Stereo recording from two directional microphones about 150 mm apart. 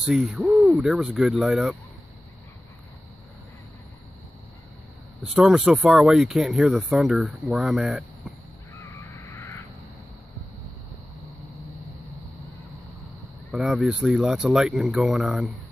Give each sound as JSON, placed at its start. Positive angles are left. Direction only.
{"t": 0.0, "sound": "speech", "side_deg": -5}
{"t": 5.2, "sound": "speech", "side_deg": -5}
{"t": 9.2, "sound": "a sound", "side_deg": 15}
{"t": 13.5, "sound": "speech", "side_deg": 0}